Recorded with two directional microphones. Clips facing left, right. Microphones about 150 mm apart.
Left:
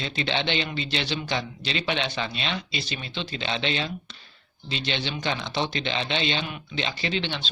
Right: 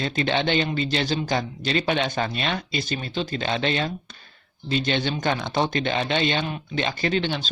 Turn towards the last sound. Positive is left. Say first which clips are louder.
# right 5 dB
turn(degrees=-45)  # may be behind; listen again after turning